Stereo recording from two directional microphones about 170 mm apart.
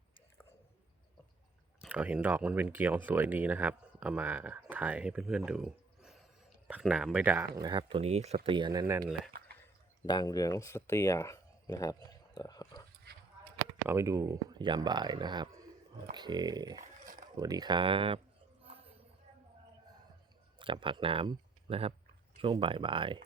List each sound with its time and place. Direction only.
1.9 s speech: 10° right (ahead or behind)
7.7 s speech: 30° right (ahead or behind)
8.4 s speech: 30° right (ahead or behind)
10.1 s speech: 20° left (ahead or behind)
13.8 s speech: 15° right (ahead or behind); by 18.2 s 30° right (ahead or behind)
18.6 s a sound: 35° right (ahead or behind)
20.6 s speech: 30° right (ahead or behind)